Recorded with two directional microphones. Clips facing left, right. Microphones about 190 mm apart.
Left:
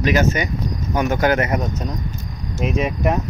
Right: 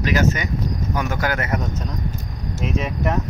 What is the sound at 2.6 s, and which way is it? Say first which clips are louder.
Speech: left 4 dB; 15° left (ahead or behind).